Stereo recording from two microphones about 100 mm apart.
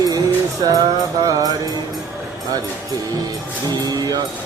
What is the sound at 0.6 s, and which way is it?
Mantra, 45° right (ahead or behind).